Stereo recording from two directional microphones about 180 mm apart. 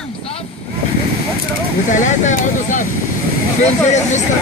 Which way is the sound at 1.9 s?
45° left (ahead or behind).